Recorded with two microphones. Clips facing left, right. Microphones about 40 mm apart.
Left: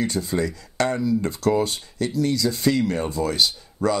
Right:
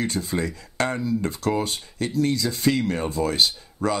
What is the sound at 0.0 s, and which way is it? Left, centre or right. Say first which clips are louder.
Speech: left 2 dB; right.